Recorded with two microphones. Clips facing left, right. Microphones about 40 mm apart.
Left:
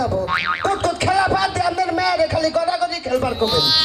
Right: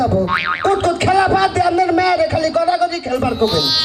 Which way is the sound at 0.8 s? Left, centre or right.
Right.